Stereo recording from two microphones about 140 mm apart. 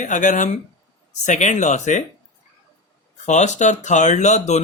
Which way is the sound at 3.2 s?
55° left (ahead or behind).